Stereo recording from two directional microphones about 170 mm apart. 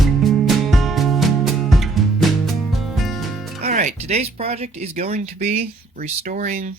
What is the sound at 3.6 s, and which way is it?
Speech, 45° right (ahead or behind).